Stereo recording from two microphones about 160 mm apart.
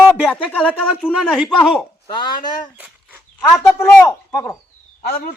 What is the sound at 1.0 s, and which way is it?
Speech, 5° right (ahead or behind).